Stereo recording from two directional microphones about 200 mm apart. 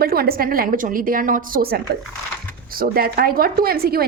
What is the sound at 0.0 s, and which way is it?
A woman's voice, 50° right (ahead or behind).